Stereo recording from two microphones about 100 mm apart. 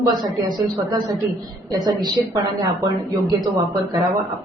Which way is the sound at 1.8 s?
40° right (ahead or behind).